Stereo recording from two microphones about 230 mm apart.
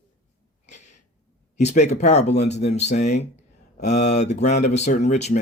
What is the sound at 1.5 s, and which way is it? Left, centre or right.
Speech, left.